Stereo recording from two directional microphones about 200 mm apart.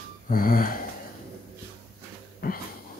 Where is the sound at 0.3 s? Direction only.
45° left (ahead or behind).